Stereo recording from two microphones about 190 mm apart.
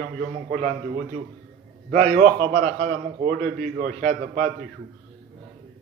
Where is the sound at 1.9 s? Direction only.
45° right (ahead or behind).